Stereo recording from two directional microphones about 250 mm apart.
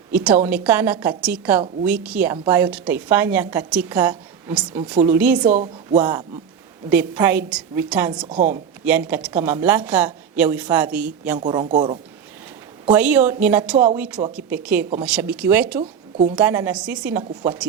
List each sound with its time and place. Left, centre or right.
0.1 s a woman's voice: centre
5.5 s speech: right
6.0 s a woman's voice: centre
11.4 s a woman's voice: centre
12.9 s a woman's voice: centre
15.8 s a sound: right
16.3 s a woman's voice: centre